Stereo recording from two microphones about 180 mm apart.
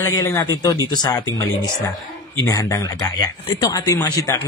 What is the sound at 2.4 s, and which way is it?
Speech, 20° left (ahead or behind).